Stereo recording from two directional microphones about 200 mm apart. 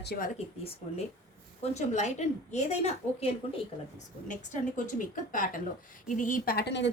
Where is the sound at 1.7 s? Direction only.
35° left (ahead or behind); by 6.8 s 55° left (ahead or behind).